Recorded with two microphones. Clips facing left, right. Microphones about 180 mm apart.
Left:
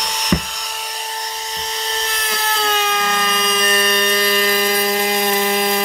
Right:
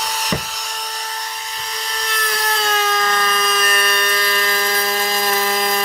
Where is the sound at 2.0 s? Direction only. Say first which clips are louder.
Even; 25° left (ahead or behind).